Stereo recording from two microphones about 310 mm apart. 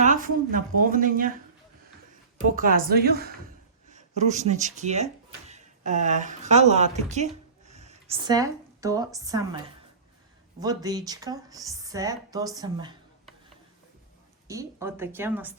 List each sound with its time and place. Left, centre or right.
0.0 s speech: right
2.6 s speech: right; by 9.6 s centre
10.6 s a woman's voice: centre
14.4 s a woman's voice: centre